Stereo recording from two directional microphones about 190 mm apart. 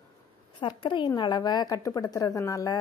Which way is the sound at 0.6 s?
25° left (ahead or behind).